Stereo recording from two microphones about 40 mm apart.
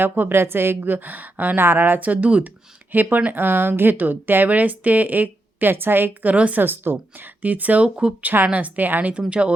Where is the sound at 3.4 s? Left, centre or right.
Right.